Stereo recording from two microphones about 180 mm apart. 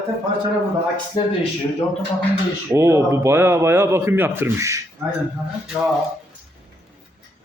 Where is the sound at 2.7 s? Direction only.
15° right (ahead or behind).